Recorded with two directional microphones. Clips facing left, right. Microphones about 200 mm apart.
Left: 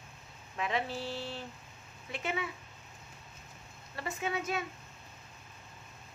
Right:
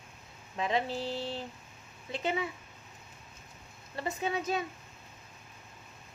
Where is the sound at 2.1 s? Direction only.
30° right (ahead or behind).